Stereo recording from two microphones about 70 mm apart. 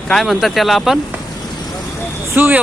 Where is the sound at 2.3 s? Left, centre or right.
Right.